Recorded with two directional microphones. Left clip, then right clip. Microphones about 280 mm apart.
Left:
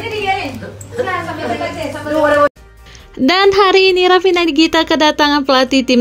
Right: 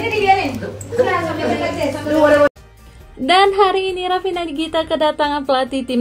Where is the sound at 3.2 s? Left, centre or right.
Left.